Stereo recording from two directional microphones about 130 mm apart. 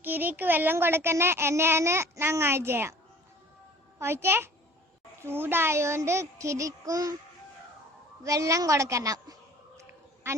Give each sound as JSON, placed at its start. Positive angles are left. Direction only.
{"t": 0.0, "sound": "a child's voice", "side_deg": -15}
{"t": 4.0, "sound": "a child's voice", "side_deg": -20}
{"t": 8.2, "sound": "a woman's voice", "side_deg": -25}